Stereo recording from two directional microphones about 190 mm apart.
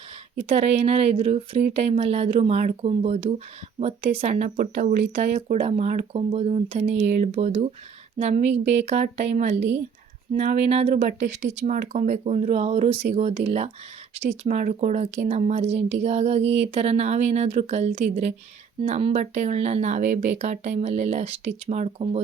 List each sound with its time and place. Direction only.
0.4 s speech: 30° right (ahead or behind)
16.4 s a sound: 65° right (ahead or behind)
16.7 s speech: 35° right (ahead or behind)